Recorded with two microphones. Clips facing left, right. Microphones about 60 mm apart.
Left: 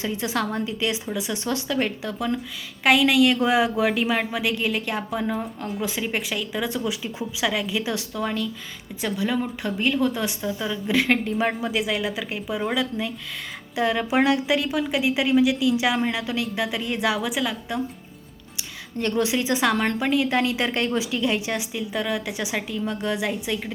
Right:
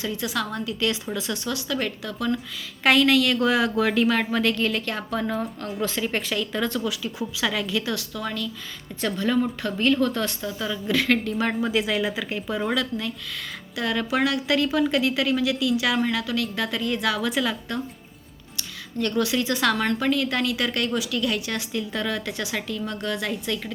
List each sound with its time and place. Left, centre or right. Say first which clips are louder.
0.0 s a woman's voice: left 2 dB; left
2.8 s a woman's voice: left 1 dB; centre; by 8.4 s left
9.0 s a woman's voice: right 2 dB; centre
11.3 s a woman's voice: even; centre
17.3 s a woman's voice: right 1 dB; centre
18.9 s a woman's voice: left 1 dB; left